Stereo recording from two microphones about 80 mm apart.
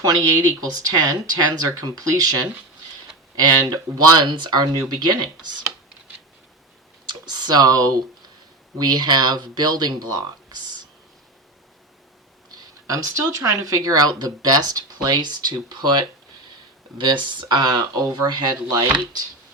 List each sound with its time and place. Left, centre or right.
0.0 s speech: right
7.1 s a sound: right
8.8 s speech: right
12.5 s speech: right